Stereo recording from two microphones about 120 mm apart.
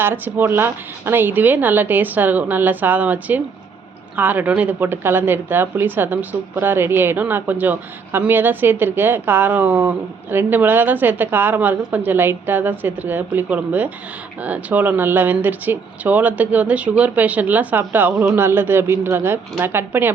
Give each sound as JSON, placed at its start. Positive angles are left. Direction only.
{"t": 0.0, "sound": "a woman's voice", "side_deg": -20}